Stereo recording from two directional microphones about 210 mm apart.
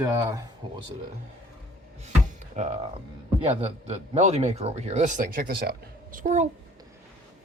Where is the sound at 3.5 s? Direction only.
30° right (ahead or behind).